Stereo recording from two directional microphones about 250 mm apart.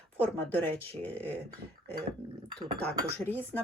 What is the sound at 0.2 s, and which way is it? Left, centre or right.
Speech, centre.